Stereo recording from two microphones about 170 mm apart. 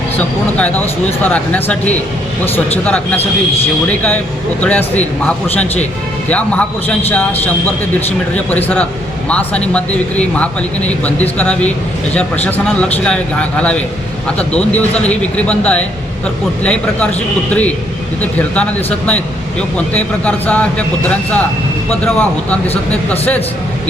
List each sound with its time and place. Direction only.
0.2 s speech: 10° left (ahead or behind)
6.2 s speech: 5° left (ahead or behind)
19.7 s speech: 10° left (ahead or behind)